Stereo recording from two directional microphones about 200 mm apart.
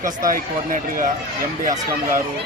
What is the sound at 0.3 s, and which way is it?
Speech, 45° right (ahead or behind).